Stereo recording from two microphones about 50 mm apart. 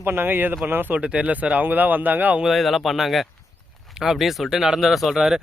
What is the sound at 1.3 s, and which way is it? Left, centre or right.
Speech, right.